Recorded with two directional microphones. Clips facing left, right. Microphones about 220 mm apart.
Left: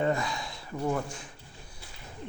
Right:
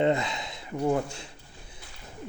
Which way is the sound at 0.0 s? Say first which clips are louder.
Right 3 dB; 25° right (ahead or behind).